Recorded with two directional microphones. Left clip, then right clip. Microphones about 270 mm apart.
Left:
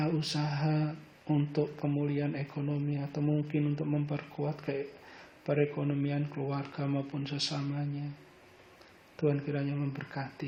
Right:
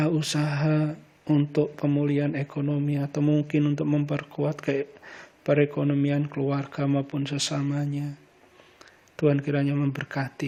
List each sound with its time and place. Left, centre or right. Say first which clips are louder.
0.0 s speech: right 7 dB; right
9.1 s speech: right 8 dB; right